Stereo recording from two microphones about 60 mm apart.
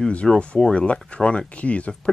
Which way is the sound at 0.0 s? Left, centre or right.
Centre.